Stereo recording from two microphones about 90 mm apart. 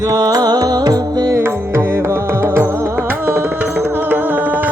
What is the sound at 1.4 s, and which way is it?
Music, 30° right (ahead or behind).